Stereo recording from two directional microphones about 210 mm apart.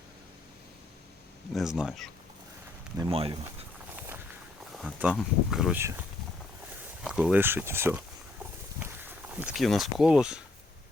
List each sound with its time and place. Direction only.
1.5 s speech: 5° right (ahead or behind)
3.0 s speech: 25° right (ahead or behind)
4.7 s speech: centre (ahead or behind)
7.0 s speech: 5° right (ahead or behind)